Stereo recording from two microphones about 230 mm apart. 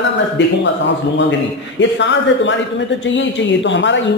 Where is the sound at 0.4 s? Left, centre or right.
Left.